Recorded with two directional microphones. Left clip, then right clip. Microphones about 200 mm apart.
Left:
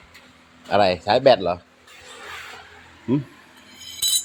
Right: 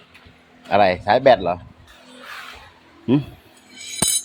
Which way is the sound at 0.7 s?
5° right (ahead or behind).